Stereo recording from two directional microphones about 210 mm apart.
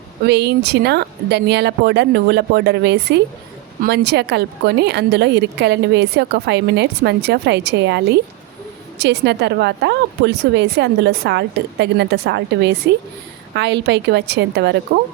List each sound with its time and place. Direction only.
0.3 s a woman's voice: 50° right (ahead or behind)